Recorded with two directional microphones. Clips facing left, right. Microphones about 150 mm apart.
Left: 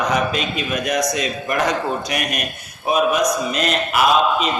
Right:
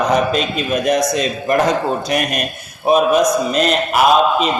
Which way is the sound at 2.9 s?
30° right (ahead or behind).